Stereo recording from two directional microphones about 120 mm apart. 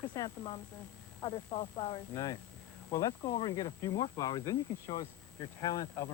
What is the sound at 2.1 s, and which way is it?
Speech, 30° left (ahead or behind).